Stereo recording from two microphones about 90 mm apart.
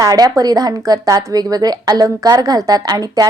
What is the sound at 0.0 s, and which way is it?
A woman's voice, 45° right (ahead or behind).